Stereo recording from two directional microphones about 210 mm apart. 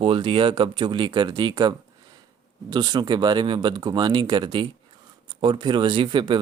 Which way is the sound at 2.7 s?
20° right (ahead or behind).